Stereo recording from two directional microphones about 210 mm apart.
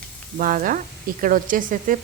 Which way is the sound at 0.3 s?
40° right (ahead or behind).